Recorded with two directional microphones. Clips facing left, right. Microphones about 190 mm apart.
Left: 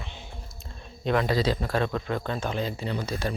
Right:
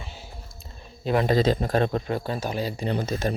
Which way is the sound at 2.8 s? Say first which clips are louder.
Right 4 dB; 50° right (ahead or behind).